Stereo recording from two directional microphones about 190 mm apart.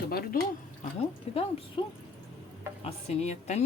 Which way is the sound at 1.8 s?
25° left (ahead or behind).